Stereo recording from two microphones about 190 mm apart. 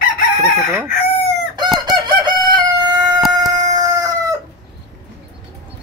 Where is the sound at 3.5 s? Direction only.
20° right (ahead or behind).